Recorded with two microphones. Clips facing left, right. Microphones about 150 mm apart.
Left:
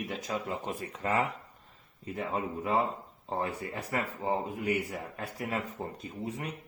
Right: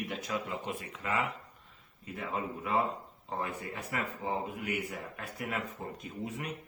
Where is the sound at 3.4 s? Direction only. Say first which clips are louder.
Left 2 dB; 35° left (ahead or behind).